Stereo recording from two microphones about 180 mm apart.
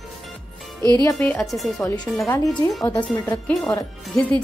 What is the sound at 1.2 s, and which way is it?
Speech, 10° left (ahead or behind).